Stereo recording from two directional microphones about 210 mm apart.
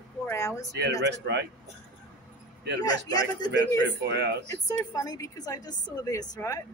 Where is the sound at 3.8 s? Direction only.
55° right (ahead or behind).